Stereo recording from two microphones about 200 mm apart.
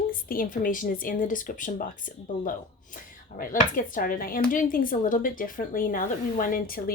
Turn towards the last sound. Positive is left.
turn(degrees=45)  # may be behind; listen again after turning